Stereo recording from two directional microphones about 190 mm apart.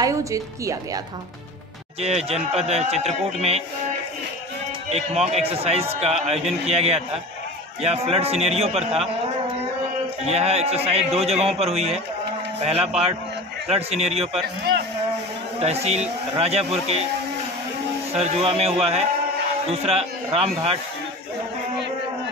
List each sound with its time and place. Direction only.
0.0 s a woman's voice: 15° right (ahead or behind)
2.0 s speech: 35° right (ahead or behind)
4.9 s speech: 35° right (ahead or behind)
10.2 s speech: 35° right (ahead or behind)
15.6 s speech: 35° right (ahead or behind)
18.2 s speech: 35° right (ahead or behind)